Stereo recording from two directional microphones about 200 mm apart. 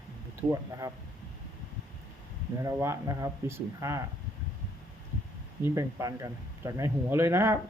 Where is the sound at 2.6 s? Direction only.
15° right (ahead or behind).